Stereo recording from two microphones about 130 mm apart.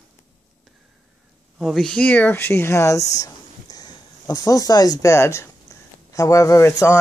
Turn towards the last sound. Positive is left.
turn(degrees=20)  # may be behind; listen again after turning